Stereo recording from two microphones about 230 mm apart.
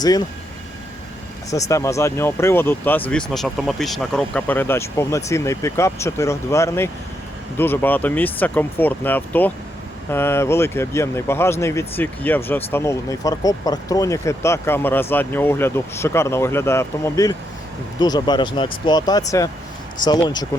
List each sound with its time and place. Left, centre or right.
1.5 s speech: centre